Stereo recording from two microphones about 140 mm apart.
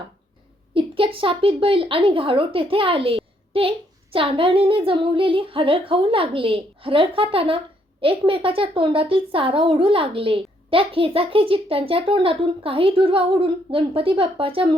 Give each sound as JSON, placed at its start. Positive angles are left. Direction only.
{"t": 0.7, "sound": "speech", "side_deg": -40}